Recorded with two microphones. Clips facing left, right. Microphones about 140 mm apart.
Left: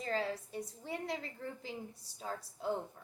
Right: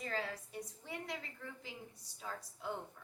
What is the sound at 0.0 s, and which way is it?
A woman's voice, 30° left (ahead or behind).